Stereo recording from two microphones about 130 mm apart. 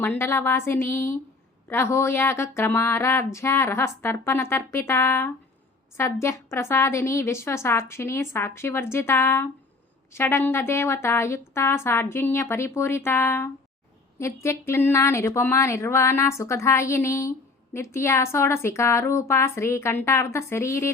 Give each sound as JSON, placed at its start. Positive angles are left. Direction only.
{"t": 0.0, "sound": "a woman's voice", "side_deg": 15}